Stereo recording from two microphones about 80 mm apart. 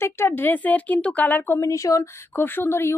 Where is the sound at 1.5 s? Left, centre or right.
Left.